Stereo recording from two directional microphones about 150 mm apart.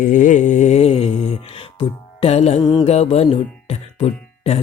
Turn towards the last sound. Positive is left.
turn(degrees=45)  # may be behind; listen again after turning